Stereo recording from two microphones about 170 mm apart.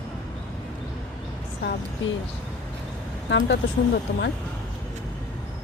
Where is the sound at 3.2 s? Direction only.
90° left.